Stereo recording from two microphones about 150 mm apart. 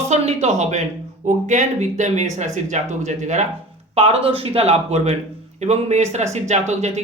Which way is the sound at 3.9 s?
40° right (ahead or behind).